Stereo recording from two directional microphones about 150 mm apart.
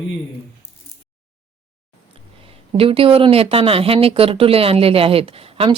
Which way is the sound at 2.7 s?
40° right (ahead or behind).